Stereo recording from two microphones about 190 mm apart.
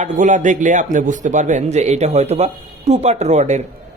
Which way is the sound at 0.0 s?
40° right (ahead or behind).